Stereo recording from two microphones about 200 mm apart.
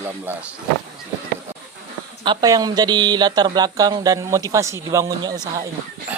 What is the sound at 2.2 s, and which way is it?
Speech, 20° right (ahead or behind).